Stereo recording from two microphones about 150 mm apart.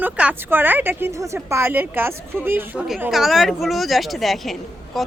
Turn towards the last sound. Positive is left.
turn(degrees=0)  # may be behind; listen again after turning